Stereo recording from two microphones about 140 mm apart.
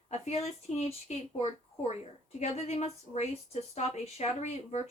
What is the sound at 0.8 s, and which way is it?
Speech, 50° left (ahead or behind).